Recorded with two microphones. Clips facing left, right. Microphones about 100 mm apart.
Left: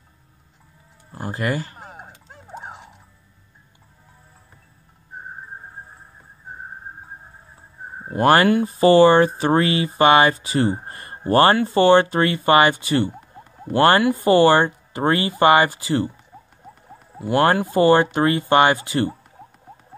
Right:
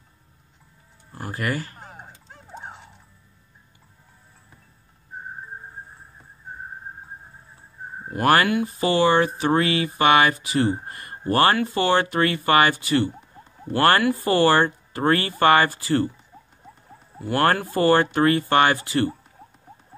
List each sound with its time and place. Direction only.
1.1 s speech: 20° left (ahead or behind)
1.8 s fowl: 5° left (ahead or behind)
2.5 s music: 5° left (ahead or behind)
8.0 s speech: 25° left (ahead or behind)
17.2 s speech: 20° left (ahead or behind)